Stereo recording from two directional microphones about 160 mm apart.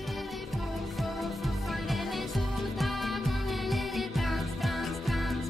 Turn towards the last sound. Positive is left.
turn(degrees=0)  # may be behind; listen again after turning